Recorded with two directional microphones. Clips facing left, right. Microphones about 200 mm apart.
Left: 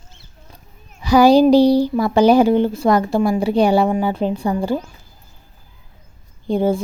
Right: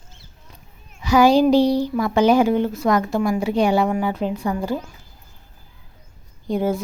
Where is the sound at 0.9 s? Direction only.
35° left (ahead or behind).